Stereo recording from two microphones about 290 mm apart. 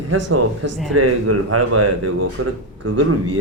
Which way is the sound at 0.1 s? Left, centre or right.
Right.